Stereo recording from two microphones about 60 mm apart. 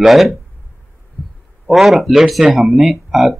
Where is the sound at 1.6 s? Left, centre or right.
Centre.